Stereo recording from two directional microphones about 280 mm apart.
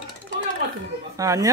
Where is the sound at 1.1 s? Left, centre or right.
Centre.